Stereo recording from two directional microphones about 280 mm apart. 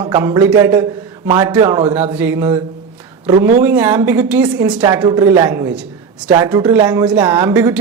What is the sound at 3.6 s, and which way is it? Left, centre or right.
Speech, centre.